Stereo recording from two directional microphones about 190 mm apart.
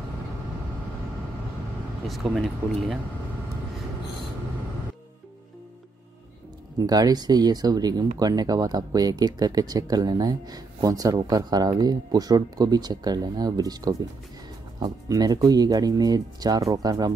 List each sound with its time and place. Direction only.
2.0 s speech: centre (ahead or behind)
6.8 s speech: 20° right (ahead or behind)